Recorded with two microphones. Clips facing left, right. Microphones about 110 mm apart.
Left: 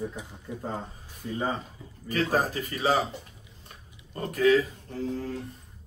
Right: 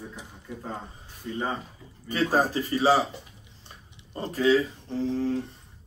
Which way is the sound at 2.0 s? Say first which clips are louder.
Right 2 dB; 30° right (ahead or behind).